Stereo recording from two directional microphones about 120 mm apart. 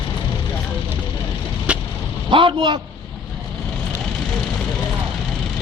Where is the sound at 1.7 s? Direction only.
10° right (ahead or behind).